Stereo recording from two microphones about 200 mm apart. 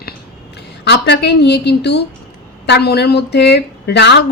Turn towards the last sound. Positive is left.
turn(degrees=55)  # may be behind; listen again after turning